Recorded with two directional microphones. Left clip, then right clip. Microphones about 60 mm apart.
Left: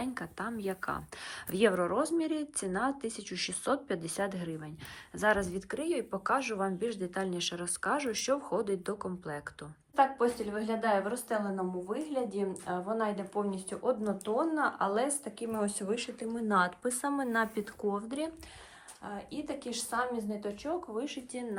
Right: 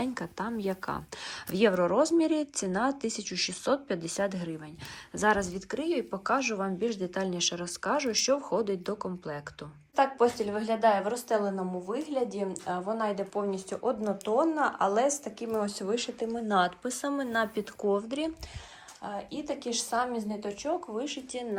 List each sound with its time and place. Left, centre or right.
0.0 s speech: right
1.8 s speech: right
3.3 s speech: centre
5.4 s speech: centre
5.7 s speech: right
9.9 s a woman's voice: right
15.5 s speech: right
16.3 s speech: centre
19.0 s speech: right
21.0 s speech: right